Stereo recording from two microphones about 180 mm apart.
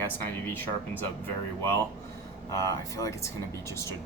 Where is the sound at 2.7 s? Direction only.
15° left (ahead or behind).